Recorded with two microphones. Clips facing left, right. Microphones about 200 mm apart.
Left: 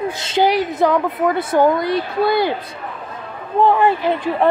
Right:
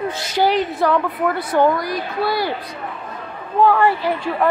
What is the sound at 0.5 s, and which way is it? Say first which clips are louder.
Speech: left 2 dB; 15° left (ahead or behind).